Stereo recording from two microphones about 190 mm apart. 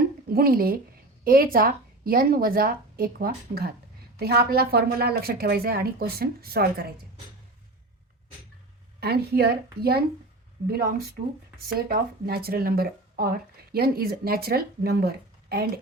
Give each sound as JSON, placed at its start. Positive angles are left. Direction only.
{"t": 0.3, "sound": "a woman's voice", "side_deg": -50}
{"t": 9.0, "sound": "a woman's voice", "side_deg": -55}